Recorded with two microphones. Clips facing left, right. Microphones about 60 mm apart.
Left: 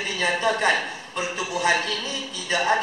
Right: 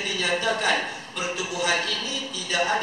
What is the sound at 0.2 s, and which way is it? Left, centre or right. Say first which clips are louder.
A man's voice: left 3 dB; left.